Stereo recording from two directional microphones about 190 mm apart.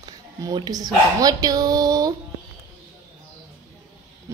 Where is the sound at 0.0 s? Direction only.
20° right (ahead or behind).